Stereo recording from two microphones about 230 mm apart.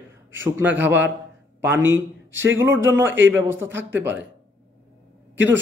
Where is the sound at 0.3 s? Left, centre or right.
Centre.